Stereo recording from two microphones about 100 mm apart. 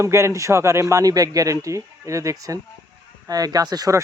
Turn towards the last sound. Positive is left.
turn(degrees=-35)  # may be behind; listen again after turning